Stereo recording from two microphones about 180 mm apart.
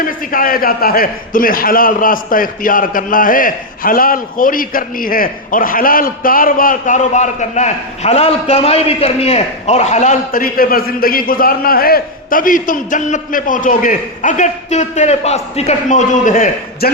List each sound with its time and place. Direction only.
0.0 s a man's voice: 50° left (ahead or behind)